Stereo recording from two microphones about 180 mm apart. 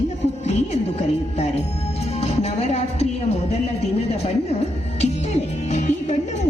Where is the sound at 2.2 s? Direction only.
35° left (ahead or behind).